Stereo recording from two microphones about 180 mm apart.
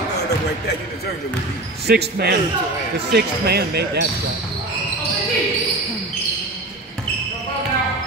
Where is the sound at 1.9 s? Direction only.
65° right (ahead or behind).